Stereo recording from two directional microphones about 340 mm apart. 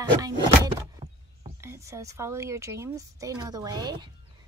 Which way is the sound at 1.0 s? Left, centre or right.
Centre.